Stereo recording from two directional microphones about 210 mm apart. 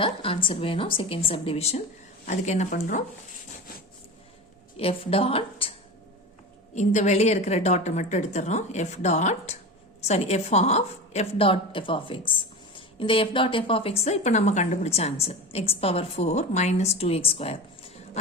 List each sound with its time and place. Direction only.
0.0 s a woman's voice: 25° left (ahead or behind)
4.8 s a woman's voice: 25° left (ahead or behind)
6.7 s a woman's voice: 35° left (ahead or behind)